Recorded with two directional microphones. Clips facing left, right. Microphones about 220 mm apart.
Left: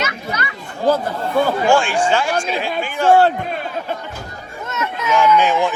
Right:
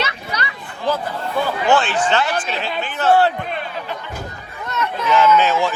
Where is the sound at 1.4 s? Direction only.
45° left (ahead or behind).